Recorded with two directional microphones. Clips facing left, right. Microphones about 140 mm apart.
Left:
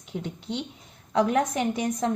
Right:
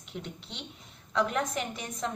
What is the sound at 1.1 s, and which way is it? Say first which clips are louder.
Speech: left 6 dB; 40° left (ahead or behind).